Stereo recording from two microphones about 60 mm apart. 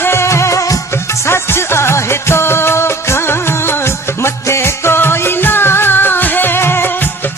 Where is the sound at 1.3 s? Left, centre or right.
Left.